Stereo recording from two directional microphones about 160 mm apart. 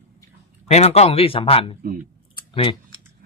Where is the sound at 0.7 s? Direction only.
40° left (ahead or behind).